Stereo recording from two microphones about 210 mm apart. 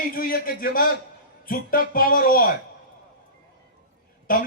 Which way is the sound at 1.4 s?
40° left (ahead or behind).